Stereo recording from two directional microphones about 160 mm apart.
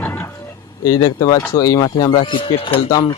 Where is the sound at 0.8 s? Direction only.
25° left (ahead or behind).